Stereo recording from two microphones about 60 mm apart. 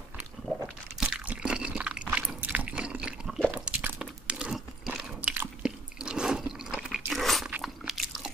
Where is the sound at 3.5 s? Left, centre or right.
Centre.